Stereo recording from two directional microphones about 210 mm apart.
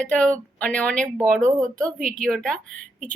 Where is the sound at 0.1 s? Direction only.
5° left (ahead or behind).